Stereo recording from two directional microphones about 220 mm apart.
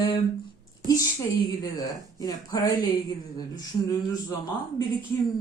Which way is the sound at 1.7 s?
15° left (ahead or behind).